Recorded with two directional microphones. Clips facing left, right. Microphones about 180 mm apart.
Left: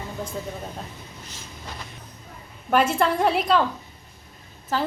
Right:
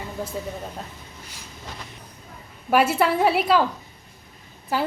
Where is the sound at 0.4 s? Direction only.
5° right (ahead or behind).